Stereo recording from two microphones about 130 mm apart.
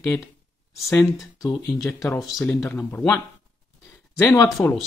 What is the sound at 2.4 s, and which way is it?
Speech, 10° left (ahead or behind).